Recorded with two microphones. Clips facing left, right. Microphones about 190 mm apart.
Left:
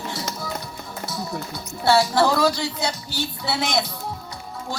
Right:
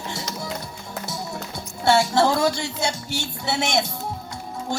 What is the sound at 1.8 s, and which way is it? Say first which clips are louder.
Music: even; 25° right (ahead or behind).